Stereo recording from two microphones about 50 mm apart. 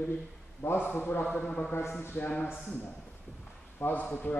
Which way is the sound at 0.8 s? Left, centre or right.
Left.